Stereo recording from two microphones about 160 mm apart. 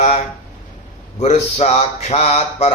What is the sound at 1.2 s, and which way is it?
Speech, 40° left (ahead or behind).